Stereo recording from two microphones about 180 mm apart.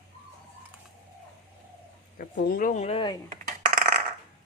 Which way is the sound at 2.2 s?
55° left (ahead or behind).